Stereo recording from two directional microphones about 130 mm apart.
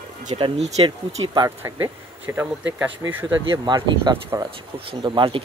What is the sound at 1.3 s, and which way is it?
Speech, 25° right (ahead or behind).